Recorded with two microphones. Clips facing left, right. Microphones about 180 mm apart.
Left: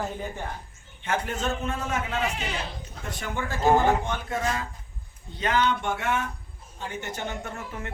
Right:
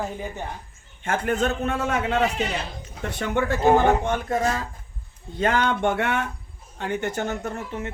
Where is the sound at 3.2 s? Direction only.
65° right (ahead or behind).